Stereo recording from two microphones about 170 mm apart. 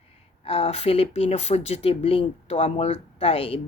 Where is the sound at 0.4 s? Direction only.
35° left (ahead or behind).